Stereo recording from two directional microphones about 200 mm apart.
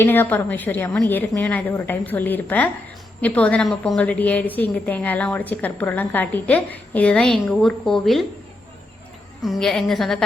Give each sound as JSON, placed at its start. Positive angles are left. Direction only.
{"t": 0.0, "sound": "a woman's voice", "side_deg": 10}
{"t": 9.4, "sound": "a woman's voice", "side_deg": 0}